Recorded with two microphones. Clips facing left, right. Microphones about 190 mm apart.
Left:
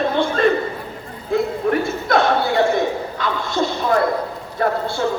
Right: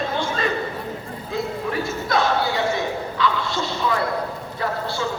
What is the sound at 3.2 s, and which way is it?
Bow-wow, 50° left (ahead or behind).